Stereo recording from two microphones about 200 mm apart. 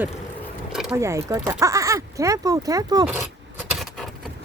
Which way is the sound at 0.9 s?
15° right (ahead or behind).